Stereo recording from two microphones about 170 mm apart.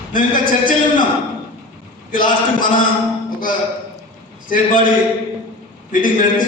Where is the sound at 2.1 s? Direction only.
55° left (ahead or behind).